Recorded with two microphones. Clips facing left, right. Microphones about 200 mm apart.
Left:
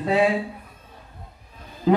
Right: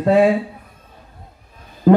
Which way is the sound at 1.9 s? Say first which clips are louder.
Right 7 dB; 55° right (ahead or behind).